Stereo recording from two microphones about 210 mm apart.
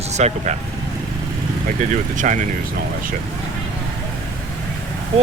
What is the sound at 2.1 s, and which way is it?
Speech, 35° right (ahead or behind).